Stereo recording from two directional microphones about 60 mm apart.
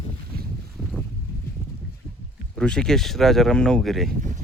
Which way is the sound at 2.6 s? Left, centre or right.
Centre.